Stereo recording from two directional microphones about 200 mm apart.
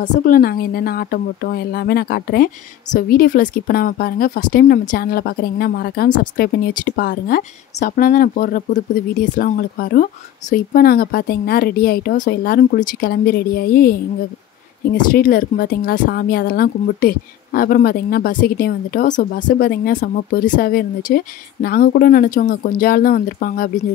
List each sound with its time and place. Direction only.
0.0 s a woman's voice: 40° left (ahead or behind)
15.0 s a woman's voice: 45° left (ahead or behind)